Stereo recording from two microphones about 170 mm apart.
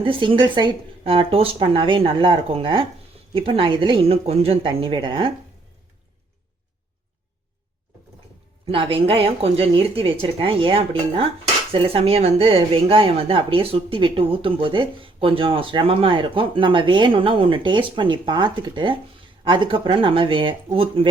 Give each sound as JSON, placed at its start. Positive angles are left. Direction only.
{"t": 0.0, "sound": "speech", "side_deg": -30}
{"t": 8.6, "sound": "speech", "side_deg": -30}